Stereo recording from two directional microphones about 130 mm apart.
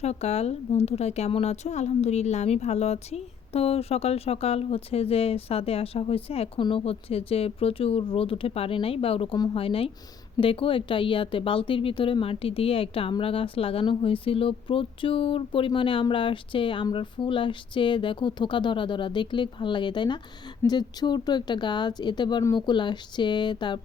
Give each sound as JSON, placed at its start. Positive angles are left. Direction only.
{"t": 0.0, "sound": "a woman's voice", "side_deg": 55}